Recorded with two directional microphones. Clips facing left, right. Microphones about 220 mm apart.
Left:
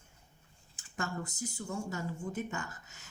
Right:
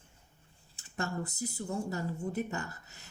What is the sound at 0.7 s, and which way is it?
Speech, 35° right (ahead or behind).